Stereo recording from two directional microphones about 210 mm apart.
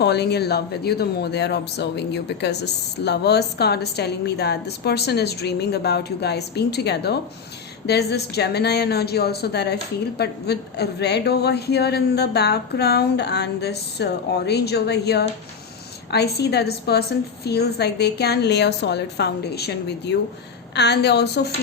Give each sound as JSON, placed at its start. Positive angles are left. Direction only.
{"t": 0.0, "sound": "speech", "side_deg": 50}